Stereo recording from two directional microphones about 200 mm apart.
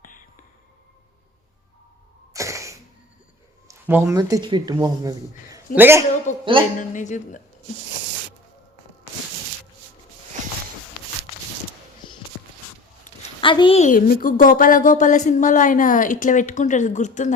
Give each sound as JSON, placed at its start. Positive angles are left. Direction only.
{"t": 2.3, "sound": "a sound", "side_deg": -15}
{"t": 3.7, "sound": "speech", "side_deg": -10}
{"t": 6.3, "sound": "a woman's voice", "side_deg": 35}
{"t": 13.4, "sound": "a woman's voice", "side_deg": 25}